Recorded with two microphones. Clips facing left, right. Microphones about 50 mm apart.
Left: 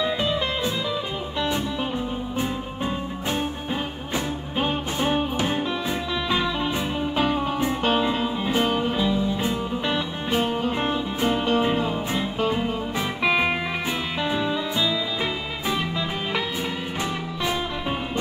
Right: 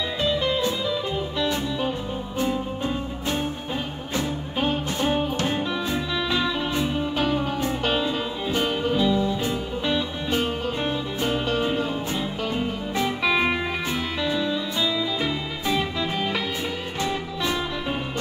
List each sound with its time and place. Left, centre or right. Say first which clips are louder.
0.0 s music: even; left
4.1 s music: right 1 dB; centre
11.1 s music: left 3 dB; centre